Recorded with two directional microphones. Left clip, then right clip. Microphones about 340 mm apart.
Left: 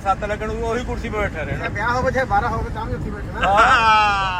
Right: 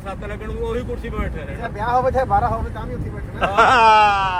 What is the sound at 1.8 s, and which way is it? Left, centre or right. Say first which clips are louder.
Speech: right 2 dB; right.